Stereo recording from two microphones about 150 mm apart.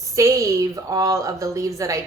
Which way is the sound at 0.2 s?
20° right (ahead or behind).